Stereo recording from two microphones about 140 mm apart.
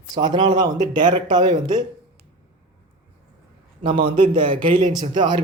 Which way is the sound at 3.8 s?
35° right (ahead or behind).